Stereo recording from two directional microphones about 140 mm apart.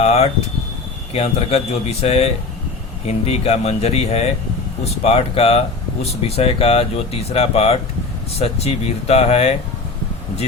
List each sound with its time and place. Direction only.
0.0 s speech: 50° left (ahead or behind)